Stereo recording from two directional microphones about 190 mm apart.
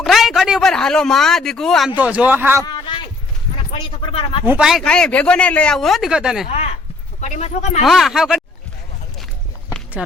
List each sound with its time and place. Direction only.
0.0 s a man's voice: centre (ahead or behind)
2.6 s a sound: 25° left (ahead or behind)
4.4 s speech: 5° right (ahead or behind)
6.5 s speech: 35° left (ahead or behind)
7.9 s speech: centre (ahead or behind)